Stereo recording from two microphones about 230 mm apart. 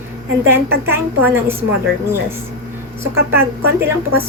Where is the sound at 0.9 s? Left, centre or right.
Centre.